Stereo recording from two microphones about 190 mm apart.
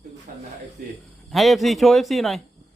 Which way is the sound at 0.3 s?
45° right (ahead or behind).